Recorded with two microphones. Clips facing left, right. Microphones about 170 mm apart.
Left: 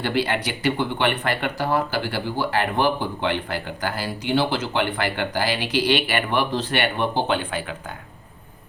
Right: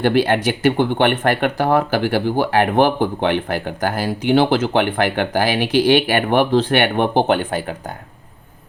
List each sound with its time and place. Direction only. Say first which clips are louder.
0.0 s speech: right 8 dB; 50° right (ahead or behind)
7.3 s speech: right 6 dB; 45° right (ahead or behind)